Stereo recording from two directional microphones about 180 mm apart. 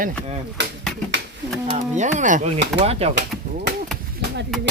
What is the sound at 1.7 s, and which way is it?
Speech, 40° right (ahead or behind).